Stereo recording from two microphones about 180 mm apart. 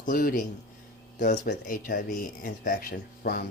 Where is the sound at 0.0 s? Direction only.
45° left (ahead or behind).